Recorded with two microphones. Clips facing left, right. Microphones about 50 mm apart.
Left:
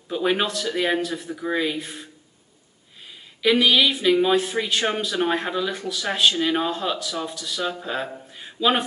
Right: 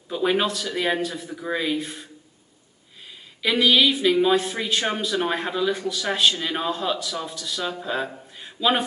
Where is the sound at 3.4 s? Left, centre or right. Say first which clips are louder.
Left 1 dB; centre.